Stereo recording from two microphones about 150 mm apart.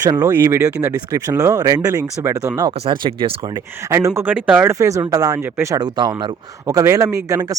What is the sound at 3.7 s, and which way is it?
Speech, 20° right (ahead or behind).